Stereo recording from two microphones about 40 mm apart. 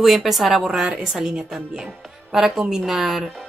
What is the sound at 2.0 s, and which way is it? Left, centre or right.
Music, centre.